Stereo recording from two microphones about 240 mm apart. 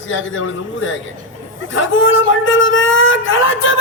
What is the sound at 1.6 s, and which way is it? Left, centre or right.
Speech, left.